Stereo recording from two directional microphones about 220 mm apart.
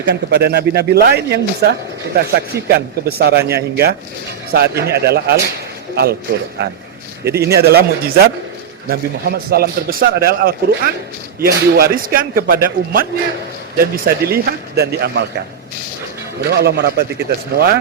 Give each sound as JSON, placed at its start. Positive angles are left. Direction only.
{"t": 0.0, "sound": "a man's voice", "side_deg": -50}
{"t": 6.6, "sound": "a man's voice", "side_deg": -50}
{"t": 16.4, "sound": "a man's voice", "side_deg": -50}